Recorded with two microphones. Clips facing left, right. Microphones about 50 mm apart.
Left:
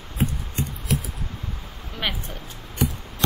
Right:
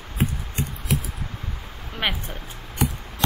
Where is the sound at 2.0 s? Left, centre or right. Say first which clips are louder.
Right 2 dB; centre.